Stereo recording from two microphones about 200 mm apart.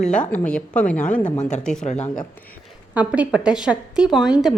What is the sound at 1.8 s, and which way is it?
Speech, 35° left (ahead or behind).